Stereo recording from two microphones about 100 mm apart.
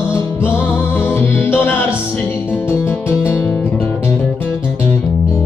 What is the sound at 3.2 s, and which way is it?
Guitar, 20° left (ahead or behind).